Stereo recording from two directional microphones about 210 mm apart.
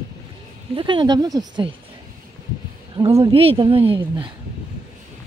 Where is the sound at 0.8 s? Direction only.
20° right (ahead or behind).